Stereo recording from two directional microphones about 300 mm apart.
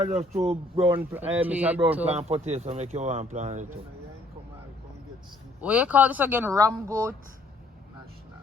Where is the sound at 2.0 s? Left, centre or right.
Right.